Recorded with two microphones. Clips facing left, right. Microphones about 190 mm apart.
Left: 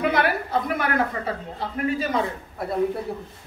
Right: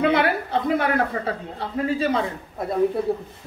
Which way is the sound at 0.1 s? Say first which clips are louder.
Right 2 dB; 25° right (ahead or behind).